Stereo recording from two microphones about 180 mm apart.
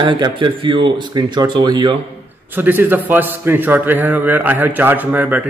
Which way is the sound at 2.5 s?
10° right (ahead or behind).